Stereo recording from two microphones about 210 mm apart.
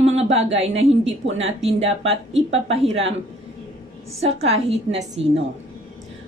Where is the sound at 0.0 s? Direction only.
30° right (ahead or behind).